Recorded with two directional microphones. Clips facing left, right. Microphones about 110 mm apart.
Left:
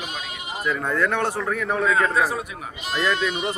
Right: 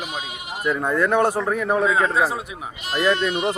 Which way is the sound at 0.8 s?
15° right (ahead or behind).